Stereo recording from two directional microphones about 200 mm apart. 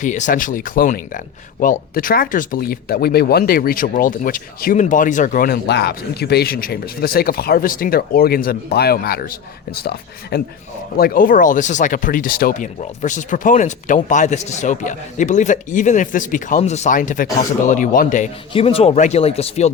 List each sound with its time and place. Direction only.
0.0 s speech: 40° left (ahead or behind)